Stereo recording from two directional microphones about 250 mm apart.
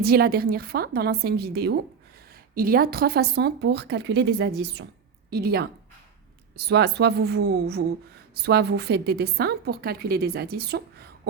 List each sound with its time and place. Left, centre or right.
0.0 s a woman's voice: right